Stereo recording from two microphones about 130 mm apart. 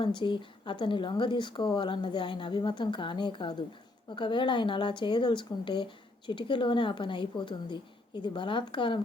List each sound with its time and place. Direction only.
0.0 s speech: 35° left (ahead or behind)